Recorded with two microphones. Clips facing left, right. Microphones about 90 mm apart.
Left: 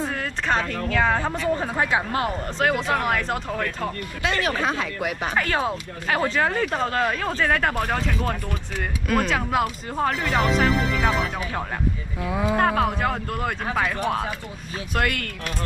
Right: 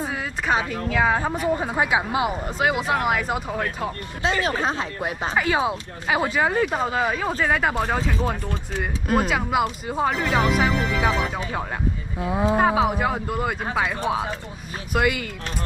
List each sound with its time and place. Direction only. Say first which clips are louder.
0.1 s speech: right 1 dB; 5° right (ahead or behind)
4.2 s speech: right 1 dB; 25° right (ahead or behind)
5.4 s speech: right 3 dB; 10° right (ahead or behind)
8.2 s speech: right 1 dB; 20° right (ahead or behind)
9.3 s speech: right 1 dB; 5° right (ahead or behind)
12.5 s speech: right 1 dB; 10° right (ahead or behind)
15.0 s speech: right 3 dB; 5° right (ahead or behind)